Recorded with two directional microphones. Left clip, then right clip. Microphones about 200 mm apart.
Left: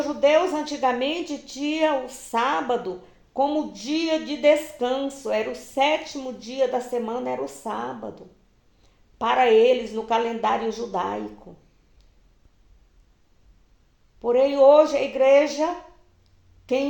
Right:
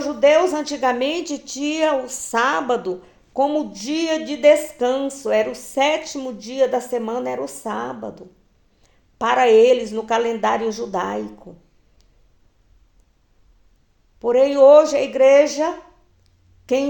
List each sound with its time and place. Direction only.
0.0 s a woman's voice: 45° right (ahead or behind)
14.2 s a woman's voice: 45° right (ahead or behind)